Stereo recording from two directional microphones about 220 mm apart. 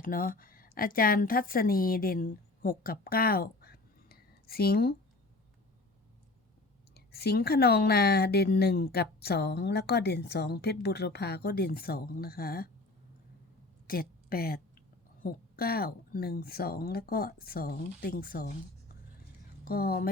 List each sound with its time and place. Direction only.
0.0 s a woman's voice: 40° left (ahead or behind)
6.9 s speech: 45° left (ahead or behind)
13.8 s speech: 40° left (ahead or behind)
19.6 s speech: 45° left (ahead or behind)